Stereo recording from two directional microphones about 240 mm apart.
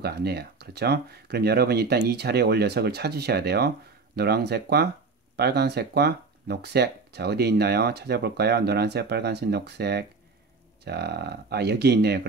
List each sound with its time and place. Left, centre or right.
0.0 s speech: right